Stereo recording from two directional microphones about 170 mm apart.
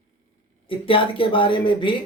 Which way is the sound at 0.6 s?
30° left (ahead or behind).